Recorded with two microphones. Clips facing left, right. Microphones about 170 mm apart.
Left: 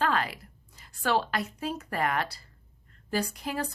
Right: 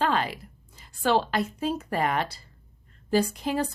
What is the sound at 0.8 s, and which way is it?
A woman's voice, 25° right (ahead or behind).